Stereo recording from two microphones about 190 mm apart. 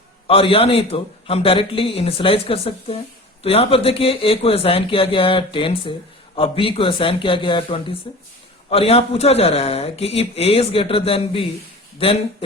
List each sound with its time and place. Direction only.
0.3 s a man's voice: 30° left (ahead or behind)